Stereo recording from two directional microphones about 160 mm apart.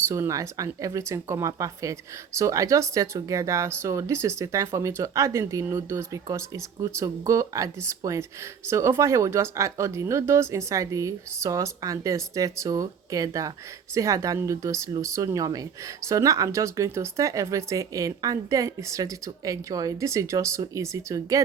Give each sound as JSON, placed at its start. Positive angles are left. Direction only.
{"t": 0.1, "sound": "speech", "side_deg": -20}